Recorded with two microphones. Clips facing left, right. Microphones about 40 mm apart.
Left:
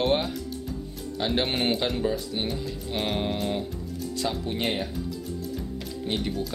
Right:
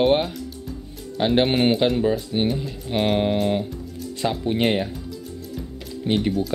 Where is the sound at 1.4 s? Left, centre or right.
Centre.